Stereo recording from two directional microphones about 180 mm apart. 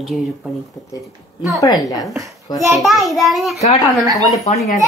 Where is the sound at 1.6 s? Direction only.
20° left (ahead or behind).